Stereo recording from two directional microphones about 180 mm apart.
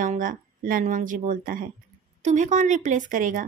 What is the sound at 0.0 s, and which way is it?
A woman's voice, 50° right (ahead or behind).